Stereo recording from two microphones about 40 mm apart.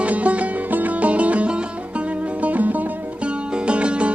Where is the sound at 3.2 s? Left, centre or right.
Right.